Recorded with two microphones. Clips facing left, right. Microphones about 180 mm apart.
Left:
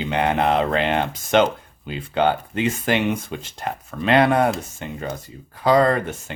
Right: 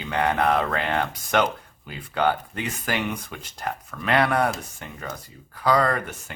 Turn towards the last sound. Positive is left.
turn(degrees=25)  # may be behind; listen again after turning